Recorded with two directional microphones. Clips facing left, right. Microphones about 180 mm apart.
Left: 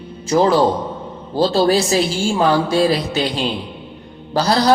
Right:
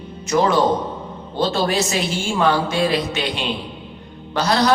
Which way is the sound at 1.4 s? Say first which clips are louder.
Left 5 dB; 35° left (ahead or behind).